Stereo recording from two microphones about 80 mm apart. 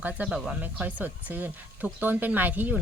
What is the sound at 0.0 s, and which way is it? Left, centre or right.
Speech, centre.